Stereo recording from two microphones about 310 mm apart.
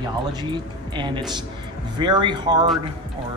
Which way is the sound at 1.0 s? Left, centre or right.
Centre.